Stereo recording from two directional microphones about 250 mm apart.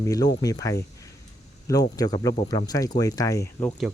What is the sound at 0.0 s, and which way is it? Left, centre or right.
Speech, centre.